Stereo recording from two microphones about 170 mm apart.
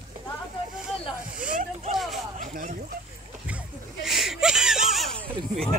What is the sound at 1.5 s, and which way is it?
Speech, 50° right (ahead or behind).